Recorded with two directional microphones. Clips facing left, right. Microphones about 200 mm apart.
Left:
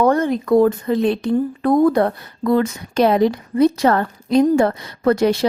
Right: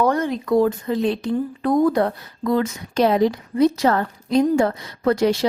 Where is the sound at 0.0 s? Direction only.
50° left (ahead or behind).